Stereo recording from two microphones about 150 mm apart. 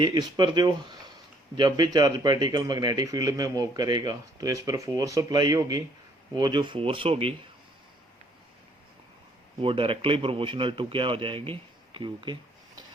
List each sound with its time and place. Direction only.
0.0 s a man's voice: 30° right (ahead or behind)
9.6 s a man's voice: 40° right (ahead or behind)